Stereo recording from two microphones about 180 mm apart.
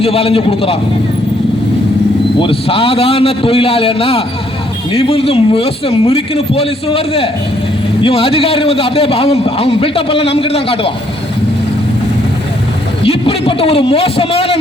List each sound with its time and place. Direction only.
0.0 s a man's voice: 30° left (ahead or behind)
2.4 s a man's voice: 30° left (ahead or behind)
13.0 s a man's voice: 30° left (ahead or behind)